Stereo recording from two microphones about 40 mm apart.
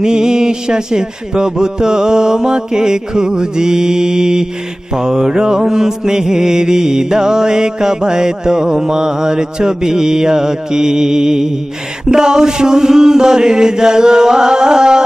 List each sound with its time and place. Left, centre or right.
0.0 s mantra: centre